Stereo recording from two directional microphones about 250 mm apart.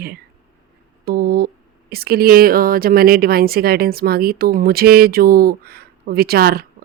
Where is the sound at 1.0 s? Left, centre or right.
Right.